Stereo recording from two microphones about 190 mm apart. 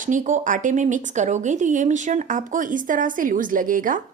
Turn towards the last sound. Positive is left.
turn(degrees=-45)  # may be behind; listen again after turning